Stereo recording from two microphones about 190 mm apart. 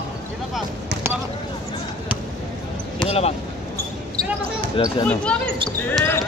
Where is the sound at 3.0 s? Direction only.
5° left (ahead or behind).